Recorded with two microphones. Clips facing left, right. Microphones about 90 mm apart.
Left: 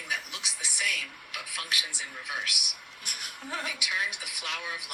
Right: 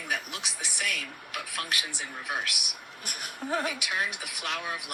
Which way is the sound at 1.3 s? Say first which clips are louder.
Right 3 dB; 45° right (ahead or behind).